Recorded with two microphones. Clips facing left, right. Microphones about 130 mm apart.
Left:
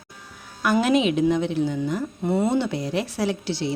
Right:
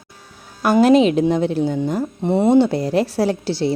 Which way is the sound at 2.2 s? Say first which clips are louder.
Right 8 dB; 25° right (ahead or behind).